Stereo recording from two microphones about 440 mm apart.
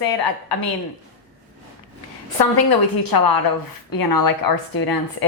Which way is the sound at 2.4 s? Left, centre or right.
Left.